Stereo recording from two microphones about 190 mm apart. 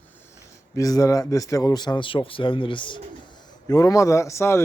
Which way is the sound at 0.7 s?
20° left (ahead or behind).